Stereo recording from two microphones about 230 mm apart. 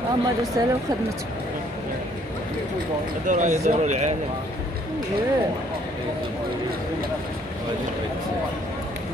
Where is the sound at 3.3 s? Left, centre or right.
Right.